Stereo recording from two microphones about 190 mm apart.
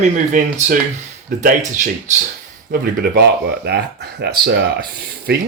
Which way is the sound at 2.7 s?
55° right (ahead or behind).